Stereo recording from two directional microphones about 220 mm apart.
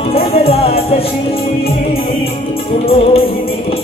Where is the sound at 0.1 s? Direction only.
25° left (ahead or behind).